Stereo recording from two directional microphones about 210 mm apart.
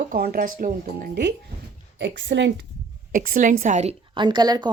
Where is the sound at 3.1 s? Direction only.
40° right (ahead or behind); by 4.6 s 20° right (ahead or behind).